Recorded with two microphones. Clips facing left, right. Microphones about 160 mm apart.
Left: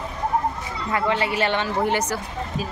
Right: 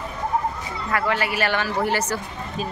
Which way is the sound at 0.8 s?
20° left (ahead or behind).